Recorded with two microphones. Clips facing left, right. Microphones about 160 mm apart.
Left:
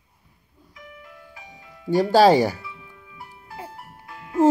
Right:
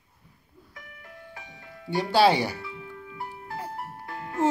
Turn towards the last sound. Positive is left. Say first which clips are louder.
# left 3 dB
turn(degrees=-50)  # may be behind; listen again after turning